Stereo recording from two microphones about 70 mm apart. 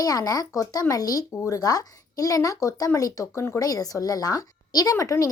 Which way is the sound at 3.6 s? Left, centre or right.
Left.